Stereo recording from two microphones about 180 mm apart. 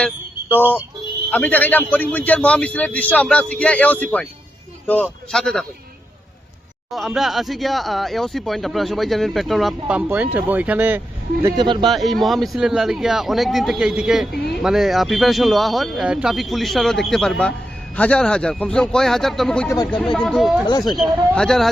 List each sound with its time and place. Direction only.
0.5 s a man's voice: 10° left (ahead or behind)
5.3 s speech: centre (ahead or behind)
6.9 s speech: centre (ahead or behind)
11.4 s speech: 25° right (ahead or behind)
11.9 s speech: centre (ahead or behind)
19.6 s speech: 20° left (ahead or behind)
20.1 s speech: centre (ahead or behind)
20.7 s speech: 25° left (ahead or behind)
20.9 s speech: centre (ahead or behind)